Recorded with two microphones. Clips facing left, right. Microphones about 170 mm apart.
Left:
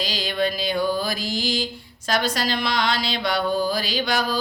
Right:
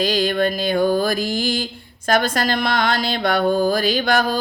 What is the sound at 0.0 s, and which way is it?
A woman's voice, 50° right (ahead or behind).